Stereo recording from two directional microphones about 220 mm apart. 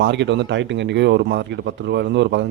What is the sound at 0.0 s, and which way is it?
Speech, 55° right (ahead or behind).